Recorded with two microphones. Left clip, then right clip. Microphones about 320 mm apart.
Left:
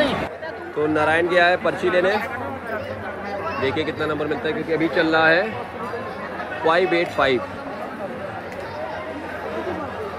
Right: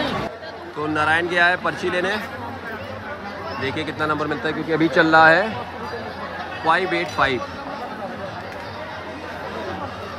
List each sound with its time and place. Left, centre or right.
0.9 s a man's voice: centre
3.6 s speech: centre
6.6 s a man's voice: centre